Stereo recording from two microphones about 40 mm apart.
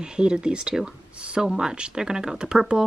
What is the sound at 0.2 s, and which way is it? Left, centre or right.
Speech, right.